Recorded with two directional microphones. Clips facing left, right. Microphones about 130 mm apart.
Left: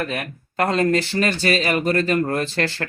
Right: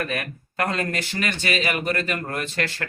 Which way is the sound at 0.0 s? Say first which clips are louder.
Left 2 dB; 25° left (ahead or behind).